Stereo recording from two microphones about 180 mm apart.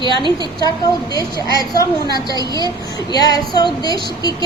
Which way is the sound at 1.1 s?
20° left (ahead or behind).